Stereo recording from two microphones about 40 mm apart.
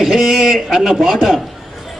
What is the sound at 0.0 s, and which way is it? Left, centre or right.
A man's voice, centre.